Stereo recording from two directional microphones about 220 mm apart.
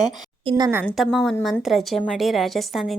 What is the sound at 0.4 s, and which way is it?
Speech, 20° right (ahead or behind).